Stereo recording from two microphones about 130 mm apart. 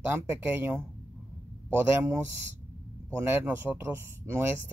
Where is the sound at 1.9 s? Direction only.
20° right (ahead or behind).